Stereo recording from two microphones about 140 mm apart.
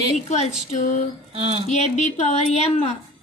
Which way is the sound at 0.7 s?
60° left (ahead or behind).